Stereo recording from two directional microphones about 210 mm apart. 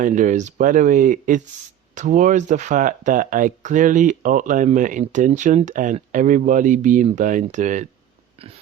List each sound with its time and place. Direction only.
0.0 s speech: 35° right (ahead or behind)